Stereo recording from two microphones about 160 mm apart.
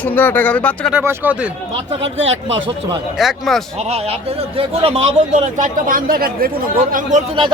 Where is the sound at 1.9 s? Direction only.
35° right (ahead or behind).